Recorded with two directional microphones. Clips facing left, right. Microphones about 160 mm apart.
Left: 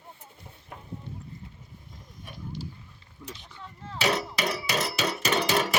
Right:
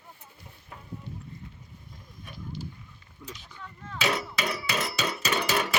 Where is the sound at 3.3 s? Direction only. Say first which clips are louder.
Even; 25° left (ahead or behind).